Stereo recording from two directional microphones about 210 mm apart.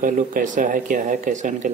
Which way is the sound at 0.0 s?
40° right (ahead or behind).